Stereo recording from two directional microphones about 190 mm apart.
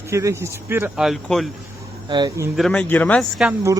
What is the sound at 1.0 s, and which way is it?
Speech, centre (ahead or behind).